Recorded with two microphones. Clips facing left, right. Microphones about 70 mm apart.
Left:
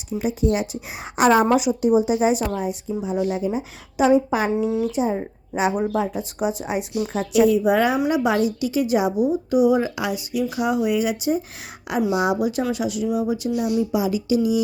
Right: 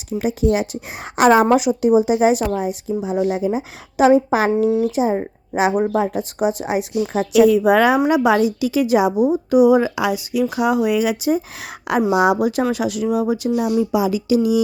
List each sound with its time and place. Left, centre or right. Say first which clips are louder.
0.2 s a woman's voice: right 3 dB; right
2.4 s a woman's voice: right 4 dB; centre
3.2 s speech: right 4 dB; right
3.4 s a woman's voice: right 4 dB; right
4.9 s speech: right 4 dB; right
5.7 s speech: right 4 dB; right
6.4 s a woman's voice: right 4 dB; right